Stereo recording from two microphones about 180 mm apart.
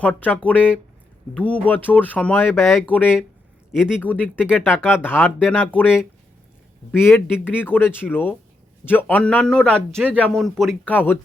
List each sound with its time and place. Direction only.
0.0 s speech: 10° left (ahead or behind)
3.7 s speech: 5° right (ahead or behind)
4.0 s speech: 10° left (ahead or behind)
4.4 s a man's voice: 5° right (ahead or behind)
5.0 s a man's voice: 10° left (ahead or behind)